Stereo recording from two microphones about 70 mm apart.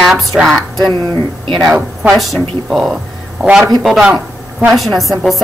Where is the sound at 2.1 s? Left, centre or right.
Centre.